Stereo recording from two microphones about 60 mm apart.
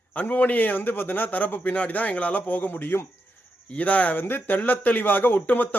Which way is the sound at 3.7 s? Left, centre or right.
Left.